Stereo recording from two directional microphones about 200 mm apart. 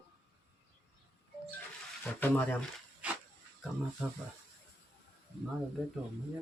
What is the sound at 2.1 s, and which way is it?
Speech, 10° left (ahead or behind).